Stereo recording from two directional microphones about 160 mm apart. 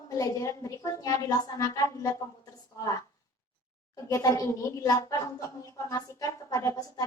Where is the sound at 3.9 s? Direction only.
20° left (ahead or behind).